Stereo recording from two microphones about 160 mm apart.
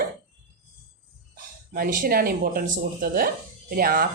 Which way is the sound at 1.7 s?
65° right (ahead or behind).